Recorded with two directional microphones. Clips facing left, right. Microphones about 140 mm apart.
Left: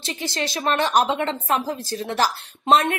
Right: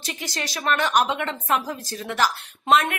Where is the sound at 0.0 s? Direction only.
25° left (ahead or behind).